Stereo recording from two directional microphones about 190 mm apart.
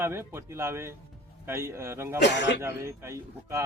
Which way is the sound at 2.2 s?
65° left (ahead or behind).